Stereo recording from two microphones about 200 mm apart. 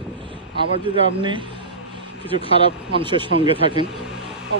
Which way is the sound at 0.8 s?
25° right (ahead or behind).